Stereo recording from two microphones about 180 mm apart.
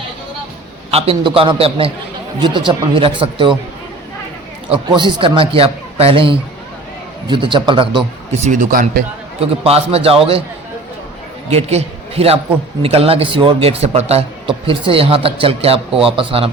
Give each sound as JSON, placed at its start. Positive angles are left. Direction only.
{"t": 0.9, "sound": "a man's voice", "side_deg": -30}
{"t": 4.7, "sound": "speech", "side_deg": -30}
{"t": 9.4, "sound": "a man's voice", "side_deg": -35}
{"t": 11.4, "sound": "a man's voice", "side_deg": -35}